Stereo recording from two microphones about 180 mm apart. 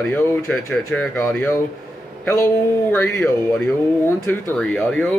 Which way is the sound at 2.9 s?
15° left (ahead or behind).